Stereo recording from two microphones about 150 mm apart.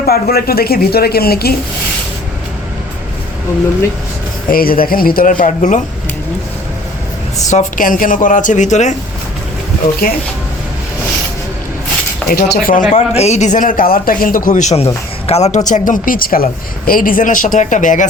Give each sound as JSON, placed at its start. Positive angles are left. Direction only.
{"t": 0.0, "sound": "a woman's voice", "side_deg": 90}
{"t": 4.4, "sound": "speech", "side_deg": 75}
{"t": 7.5, "sound": "speech", "side_deg": 60}
{"t": 10.0, "sound": "speech", "side_deg": 90}
{"t": 12.3, "sound": "speech", "side_deg": 75}
{"t": 12.9, "sound": "speech", "side_deg": 45}